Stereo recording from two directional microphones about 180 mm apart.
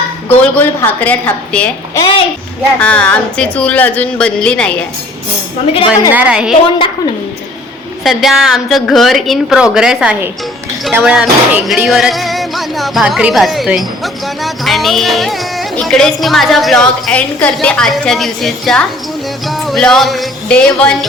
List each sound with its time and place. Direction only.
0.3 s speech: 10° left (ahead or behind)
2.0 s a woman's voice: 25° left (ahead or behind)
2.8 s speech: 5° left (ahead or behind)
5.7 s a woman's voice: 30° left (ahead or behind)
6.1 s a woman's voice: 5° right (ahead or behind)
6.5 s a woman's voice: 30° left (ahead or behind)
8.0 s music: centre (ahead or behind)